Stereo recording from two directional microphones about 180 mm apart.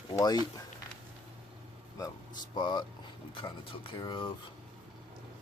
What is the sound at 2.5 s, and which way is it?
Speech, 25° left (ahead or behind).